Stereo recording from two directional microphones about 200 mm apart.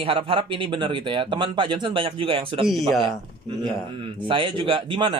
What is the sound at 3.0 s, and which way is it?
Speech, 25° right (ahead or behind).